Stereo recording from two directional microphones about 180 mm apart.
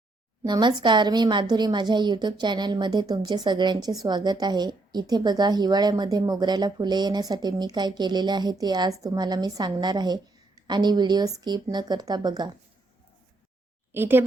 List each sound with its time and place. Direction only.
0.4 s a woman's voice: 25° right (ahead or behind)
13.9 s speech: 10° right (ahead or behind)